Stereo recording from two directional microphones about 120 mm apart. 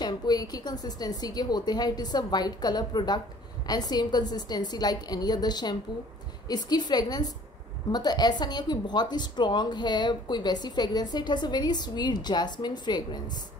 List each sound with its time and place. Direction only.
0.0 s a woman's voice: 30° left (ahead or behind)